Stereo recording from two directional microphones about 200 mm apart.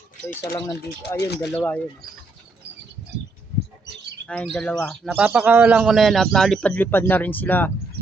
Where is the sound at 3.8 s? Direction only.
55° right (ahead or behind).